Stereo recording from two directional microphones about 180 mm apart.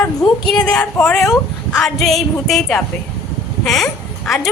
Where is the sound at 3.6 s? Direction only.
Centre (ahead or behind).